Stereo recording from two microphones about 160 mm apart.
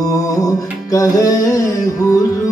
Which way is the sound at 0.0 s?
20° left (ahead or behind).